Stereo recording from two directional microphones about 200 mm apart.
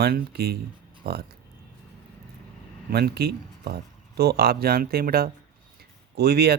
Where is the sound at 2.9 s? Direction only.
55° right (ahead or behind).